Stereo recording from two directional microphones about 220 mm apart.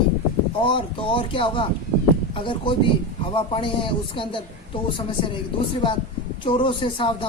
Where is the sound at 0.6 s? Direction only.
20° left (ahead or behind).